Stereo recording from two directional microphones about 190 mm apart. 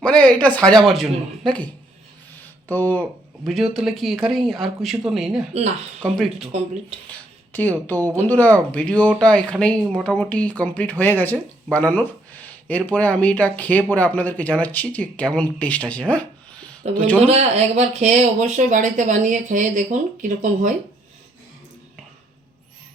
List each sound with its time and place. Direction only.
0.0 s speech: 5° left (ahead or behind)
2.3 s a sound: 10° left (ahead or behind)
3.0 s speech: centre (ahead or behind)
16.8 s speech: 35° right (ahead or behind)